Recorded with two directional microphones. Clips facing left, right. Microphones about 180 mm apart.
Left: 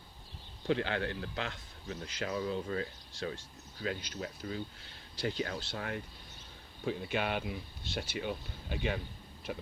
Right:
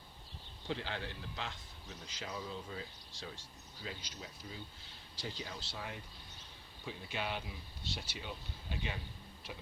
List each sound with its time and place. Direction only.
0.7 s speech: 65° left (ahead or behind)